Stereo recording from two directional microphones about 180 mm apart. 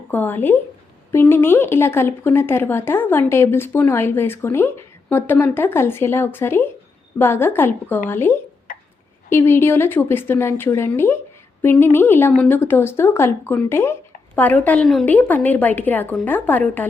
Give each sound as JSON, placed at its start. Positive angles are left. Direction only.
{"t": 0.1, "sound": "speech", "side_deg": 10}
{"t": 8.7, "sound": "hiccup", "side_deg": 50}
{"t": 9.3, "sound": "speech", "side_deg": 15}